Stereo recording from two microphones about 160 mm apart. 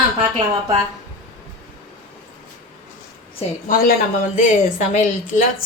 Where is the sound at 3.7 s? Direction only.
60° left (ahead or behind).